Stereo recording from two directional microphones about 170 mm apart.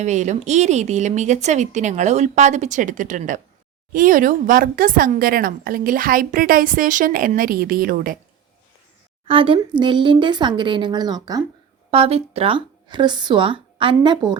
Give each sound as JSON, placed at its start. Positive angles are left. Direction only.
{"t": 0.0, "sound": "speech", "side_deg": -45}
{"t": 9.2, "sound": "a woman's voice", "side_deg": -35}
{"t": 11.9, "sound": "speech", "side_deg": -35}